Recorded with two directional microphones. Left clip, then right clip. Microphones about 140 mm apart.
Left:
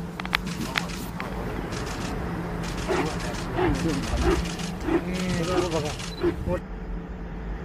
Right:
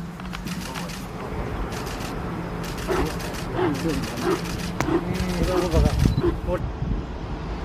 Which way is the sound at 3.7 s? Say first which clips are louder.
Right 1 dB; 15° right (ahead or behind).